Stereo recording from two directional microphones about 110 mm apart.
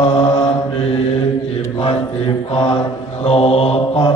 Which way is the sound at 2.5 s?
65° left (ahead or behind).